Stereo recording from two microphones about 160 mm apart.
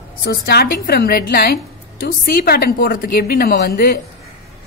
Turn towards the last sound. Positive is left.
turn(degrees=75)  # may be behind; listen again after turning